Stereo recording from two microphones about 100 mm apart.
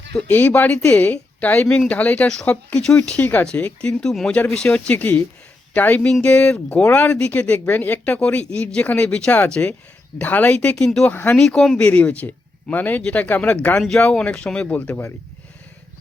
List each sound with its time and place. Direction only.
0.1 s a woman's voice: 20° left (ahead or behind)
11.1 s speech: 20° left (ahead or behind)
11.3 s speech: 5° left (ahead or behind)
11.8 s speech: 15° left (ahead or behind)